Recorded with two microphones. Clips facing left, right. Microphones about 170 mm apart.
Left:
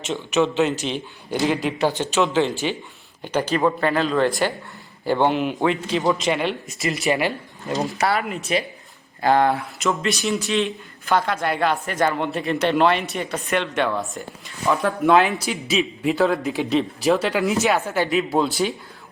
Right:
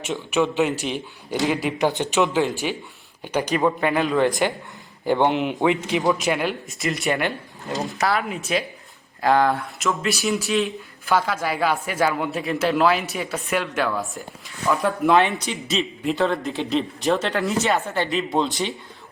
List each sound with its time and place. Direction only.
0.0 s a man's voice: 10° right (ahead or behind)
6.0 s speech: centre (ahead or behind)